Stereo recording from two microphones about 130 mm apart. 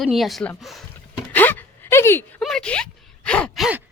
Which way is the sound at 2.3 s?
5° left (ahead or behind).